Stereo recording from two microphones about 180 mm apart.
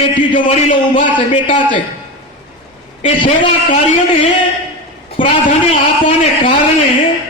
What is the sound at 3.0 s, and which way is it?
Speech, 30° left (ahead or behind).